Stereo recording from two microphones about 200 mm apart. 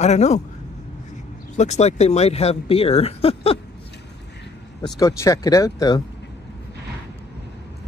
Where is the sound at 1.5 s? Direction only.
35° left (ahead or behind).